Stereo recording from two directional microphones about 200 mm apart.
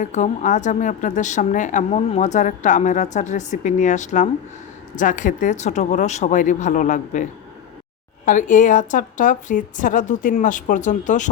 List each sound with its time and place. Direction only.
0.0 s a woman's voice: 35° left (ahead or behind)